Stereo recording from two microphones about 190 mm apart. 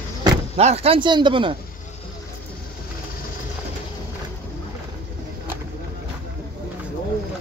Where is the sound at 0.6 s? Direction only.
35° right (ahead or behind).